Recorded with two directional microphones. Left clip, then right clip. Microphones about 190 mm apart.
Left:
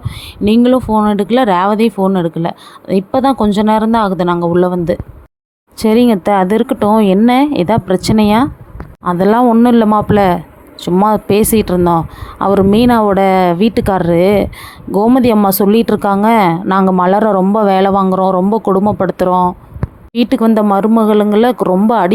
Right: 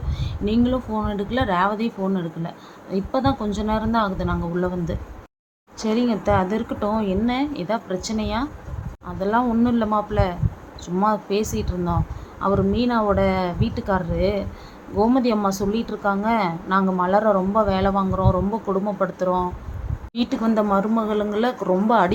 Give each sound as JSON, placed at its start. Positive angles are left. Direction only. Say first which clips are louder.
{"t": 0.4, "sound": "speech", "louder": "left 12 dB", "side_deg": 50}